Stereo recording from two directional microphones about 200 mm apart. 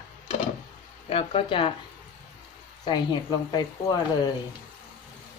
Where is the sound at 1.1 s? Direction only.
30° left (ahead or behind).